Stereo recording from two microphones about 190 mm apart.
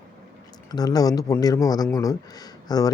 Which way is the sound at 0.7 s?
20° left (ahead or behind).